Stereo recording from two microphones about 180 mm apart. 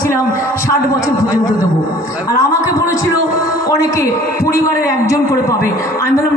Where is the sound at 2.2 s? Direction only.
15° left (ahead or behind).